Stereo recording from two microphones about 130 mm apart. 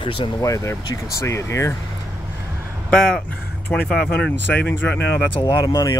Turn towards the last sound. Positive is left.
turn(degrees=25)  # may be behind; listen again after turning